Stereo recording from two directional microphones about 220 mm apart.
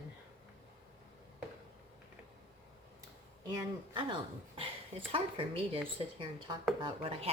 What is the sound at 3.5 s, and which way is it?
Speech, 20° right (ahead or behind).